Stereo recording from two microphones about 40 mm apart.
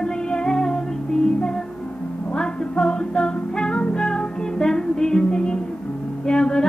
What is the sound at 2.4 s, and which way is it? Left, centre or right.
Music, left.